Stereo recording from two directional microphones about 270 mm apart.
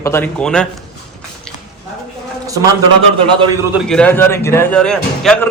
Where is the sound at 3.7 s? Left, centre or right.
Centre.